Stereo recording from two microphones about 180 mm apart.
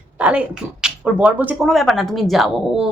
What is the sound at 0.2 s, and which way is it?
Speech, 5° right (ahead or behind).